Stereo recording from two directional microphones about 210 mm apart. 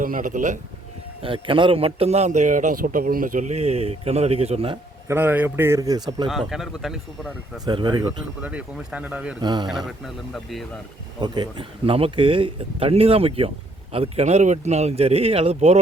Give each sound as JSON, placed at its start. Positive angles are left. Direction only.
{"t": 0.0, "sound": "a man's voice", "side_deg": -40}
{"t": 1.2, "sound": "a man's voice", "side_deg": -25}
{"t": 5.0, "sound": "a man's voice", "side_deg": -10}
{"t": 6.5, "sound": "speech", "side_deg": 0}
{"t": 7.6, "sound": "speech", "side_deg": -20}
{"t": 8.4, "sound": "a man's voice", "side_deg": -5}
{"t": 9.4, "sound": "speech", "side_deg": -20}
{"t": 9.6, "sound": "speech", "side_deg": 0}
{"t": 11.2, "sound": "speech", "side_deg": -20}